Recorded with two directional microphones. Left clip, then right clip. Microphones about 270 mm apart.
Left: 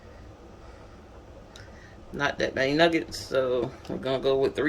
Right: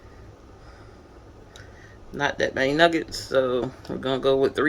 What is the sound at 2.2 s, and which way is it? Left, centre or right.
Speech, centre.